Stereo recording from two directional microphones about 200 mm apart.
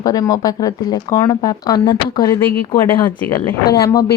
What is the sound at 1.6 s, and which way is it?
Speech, 20° left (ahead or behind).